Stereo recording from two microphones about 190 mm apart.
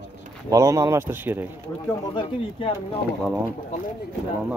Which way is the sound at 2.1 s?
30° left (ahead or behind).